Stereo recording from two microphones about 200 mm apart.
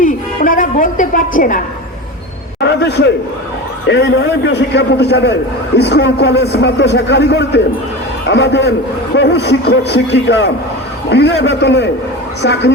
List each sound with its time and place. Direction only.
0.0 s music: 40° left (ahead or behind)
1.4 s a woman's voice: 40° left (ahead or behind)
2.6 s a sound: 55° left (ahead or behind)
3.8 s a man's voice: 60° left (ahead or behind)